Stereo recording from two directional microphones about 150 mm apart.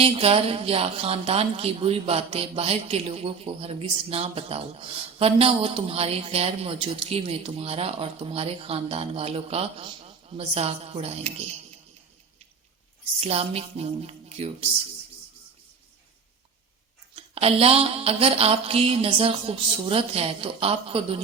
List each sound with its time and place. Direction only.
0.0 s a woman's voice: 40° right (ahead or behind)
13.1 s speech: 40° right (ahead or behind)
17.2 s a woman's voice: 40° right (ahead or behind)